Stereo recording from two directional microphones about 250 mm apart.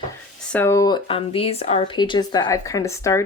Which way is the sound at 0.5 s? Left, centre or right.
Centre.